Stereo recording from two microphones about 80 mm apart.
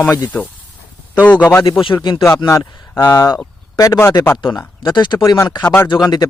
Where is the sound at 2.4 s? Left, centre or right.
Left.